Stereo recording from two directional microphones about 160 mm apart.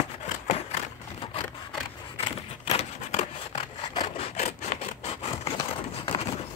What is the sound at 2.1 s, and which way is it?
Scissors, 40° left (ahead or behind).